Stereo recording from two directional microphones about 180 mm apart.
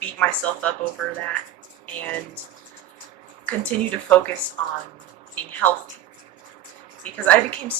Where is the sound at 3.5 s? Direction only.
5° left (ahead or behind).